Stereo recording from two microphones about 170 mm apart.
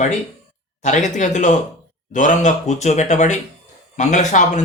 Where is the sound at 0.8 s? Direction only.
45° left (ahead or behind).